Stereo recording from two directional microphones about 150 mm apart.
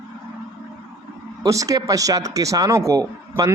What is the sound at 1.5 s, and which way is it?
A man's voice, 20° right (ahead or behind).